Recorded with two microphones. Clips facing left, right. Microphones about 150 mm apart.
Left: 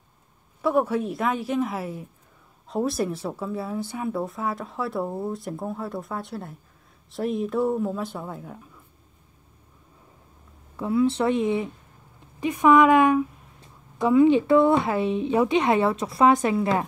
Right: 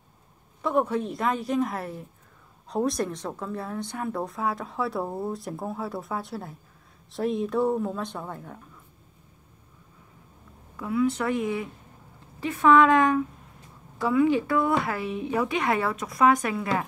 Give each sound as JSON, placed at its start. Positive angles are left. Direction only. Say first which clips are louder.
{"t": 0.6, "sound": "speech", "louder": "left 2 dB", "side_deg": 5}
{"t": 10.8, "sound": "a woman's voice", "louder": "left 3 dB", "side_deg": 30}